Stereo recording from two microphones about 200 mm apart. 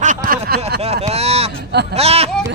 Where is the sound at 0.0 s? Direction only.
40° right (ahead or behind).